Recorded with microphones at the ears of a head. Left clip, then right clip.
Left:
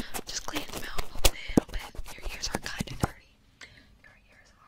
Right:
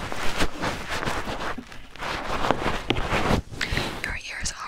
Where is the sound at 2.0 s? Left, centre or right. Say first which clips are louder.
Right 17 dB; right.